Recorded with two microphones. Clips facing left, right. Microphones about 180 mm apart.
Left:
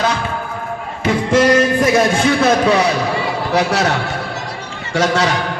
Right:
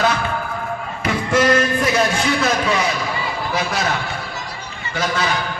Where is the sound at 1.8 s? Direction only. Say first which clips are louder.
Left 5 dB; 50° left (ahead or behind); by 4.0 s 75° left (ahead or behind).